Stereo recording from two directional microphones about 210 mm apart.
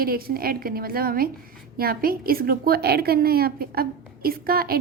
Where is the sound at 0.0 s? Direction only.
45° right (ahead or behind).